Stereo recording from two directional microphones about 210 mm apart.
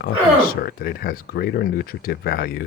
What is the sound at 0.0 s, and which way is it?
Speech, 45° left (ahead or behind).